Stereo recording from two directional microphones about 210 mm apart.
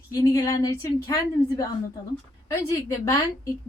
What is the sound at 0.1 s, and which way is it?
A woman's voice, 15° left (ahead or behind).